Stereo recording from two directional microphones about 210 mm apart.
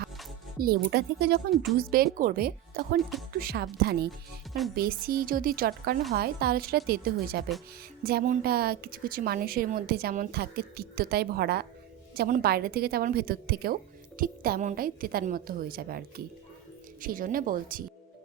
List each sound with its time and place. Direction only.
0.8 s a woman's voice: 50° right (ahead or behind)
3.0 s speech: centre (ahead or behind)
3.3 s a woman's voice: 50° right (ahead or behind)